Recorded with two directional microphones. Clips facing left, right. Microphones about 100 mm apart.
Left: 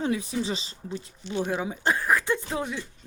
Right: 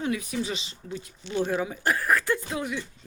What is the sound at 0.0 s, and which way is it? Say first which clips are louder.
Speech: left 1 dB; 30° left (ahead or behind).